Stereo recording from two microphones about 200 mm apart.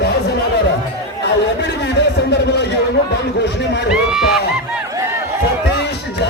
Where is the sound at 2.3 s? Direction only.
55° left (ahead or behind).